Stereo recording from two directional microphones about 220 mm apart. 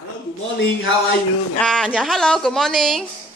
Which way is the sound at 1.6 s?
5° left (ahead or behind).